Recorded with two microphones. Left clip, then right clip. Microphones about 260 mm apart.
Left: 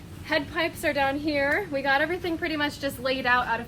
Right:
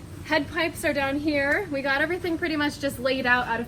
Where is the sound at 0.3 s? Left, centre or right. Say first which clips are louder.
Right 1 dB; left.